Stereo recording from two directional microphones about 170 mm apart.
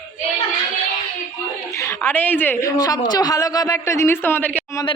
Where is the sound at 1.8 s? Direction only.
15° left (ahead or behind).